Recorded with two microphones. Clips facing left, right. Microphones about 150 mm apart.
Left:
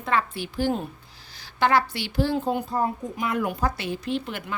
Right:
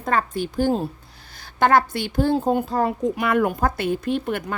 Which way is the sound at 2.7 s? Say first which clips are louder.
Right 5 dB; 80° right.